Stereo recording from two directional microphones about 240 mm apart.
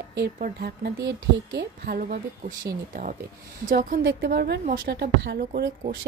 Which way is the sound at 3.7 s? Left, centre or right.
Right.